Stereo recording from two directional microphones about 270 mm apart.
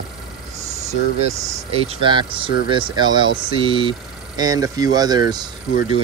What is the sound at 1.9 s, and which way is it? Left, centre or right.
Speech, centre.